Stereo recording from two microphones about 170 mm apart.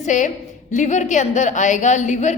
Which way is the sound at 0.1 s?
45° left (ahead or behind).